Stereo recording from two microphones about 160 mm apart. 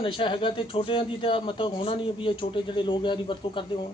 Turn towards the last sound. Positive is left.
turn(degrees=30)  # may be behind; listen again after turning